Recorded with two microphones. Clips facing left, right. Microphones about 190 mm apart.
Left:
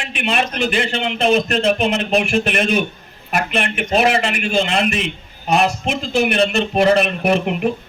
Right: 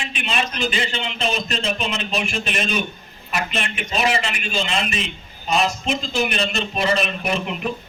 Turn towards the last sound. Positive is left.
turn(degrees=60)  # may be behind; listen again after turning